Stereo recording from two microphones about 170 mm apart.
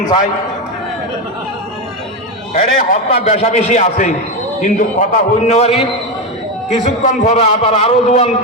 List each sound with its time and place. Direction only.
2.6 s a man's voice: 45° left (ahead or behind)